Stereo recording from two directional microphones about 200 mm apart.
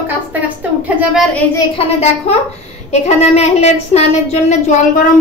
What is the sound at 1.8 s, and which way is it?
A woman's voice, 30° left (ahead or behind).